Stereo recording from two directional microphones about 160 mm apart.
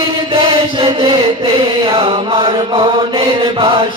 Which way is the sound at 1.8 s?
35° right (ahead or behind).